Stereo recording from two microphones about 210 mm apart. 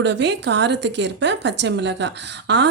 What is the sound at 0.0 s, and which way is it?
A woman's voice, 55° right (ahead or behind).